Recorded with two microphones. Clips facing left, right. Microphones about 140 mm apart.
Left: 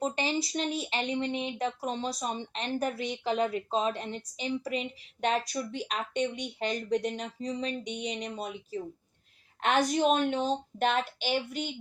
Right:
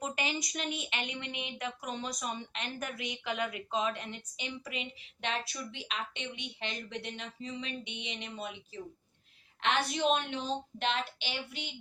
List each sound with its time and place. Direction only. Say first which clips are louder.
0.0 s a woman's voice: left 6 dB; 30° left (ahead or behind)